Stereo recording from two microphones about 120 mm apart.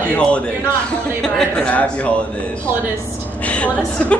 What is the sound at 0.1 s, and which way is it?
Speech, 10° left (ahead or behind).